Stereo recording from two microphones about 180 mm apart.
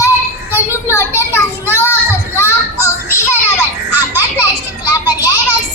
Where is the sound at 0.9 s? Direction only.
15° left (ahead or behind).